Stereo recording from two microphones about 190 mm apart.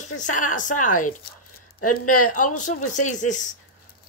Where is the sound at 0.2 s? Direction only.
40° left (ahead or behind).